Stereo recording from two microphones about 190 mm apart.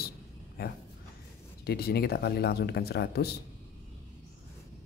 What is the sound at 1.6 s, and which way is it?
Speech, 55° left (ahead or behind).